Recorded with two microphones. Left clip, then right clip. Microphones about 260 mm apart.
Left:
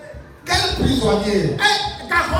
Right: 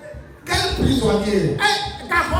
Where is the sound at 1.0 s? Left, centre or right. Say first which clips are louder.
Left 2 dB; centre.